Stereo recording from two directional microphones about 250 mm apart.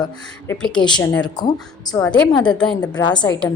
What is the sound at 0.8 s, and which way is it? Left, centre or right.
A woman's voice, centre.